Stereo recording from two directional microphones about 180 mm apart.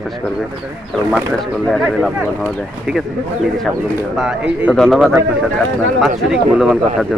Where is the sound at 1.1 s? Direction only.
Centre (ahead or behind).